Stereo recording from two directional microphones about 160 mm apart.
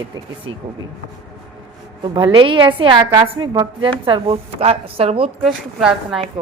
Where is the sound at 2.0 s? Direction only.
30° right (ahead or behind).